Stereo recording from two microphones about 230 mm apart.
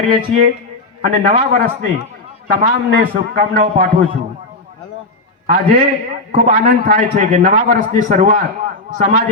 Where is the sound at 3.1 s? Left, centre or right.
Right.